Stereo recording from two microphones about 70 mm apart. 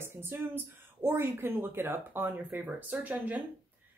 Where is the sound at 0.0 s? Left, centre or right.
Right.